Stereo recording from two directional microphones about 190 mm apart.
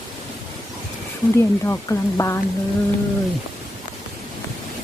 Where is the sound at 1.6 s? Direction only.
15° left (ahead or behind).